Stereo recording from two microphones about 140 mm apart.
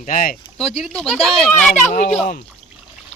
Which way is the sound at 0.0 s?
80° left.